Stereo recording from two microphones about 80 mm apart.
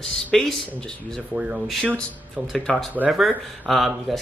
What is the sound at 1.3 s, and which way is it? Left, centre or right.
Speech, centre.